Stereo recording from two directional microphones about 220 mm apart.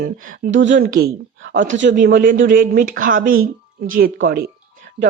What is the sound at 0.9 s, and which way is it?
Speech, 45° right (ahead or behind).